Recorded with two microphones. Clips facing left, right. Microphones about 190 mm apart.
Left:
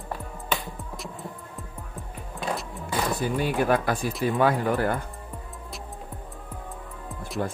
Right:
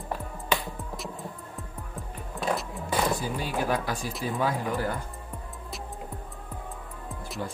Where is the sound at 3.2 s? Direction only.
60° left (ahead or behind).